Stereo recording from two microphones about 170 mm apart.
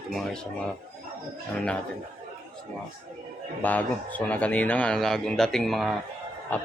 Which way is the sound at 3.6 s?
10° left (ahead or behind).